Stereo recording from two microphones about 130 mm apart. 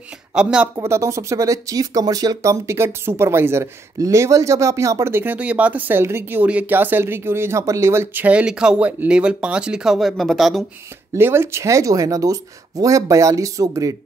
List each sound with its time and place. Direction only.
0.3 s speech: 5° right (ahead or behind)
0.7 s speech: 20° right (ahead or behind); by 10.6 s centre (ahead or behind)
11.1 s speech: 20° right (ahead or behind)